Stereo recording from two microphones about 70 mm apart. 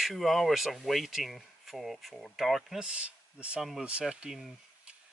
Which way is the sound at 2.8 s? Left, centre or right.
Centre.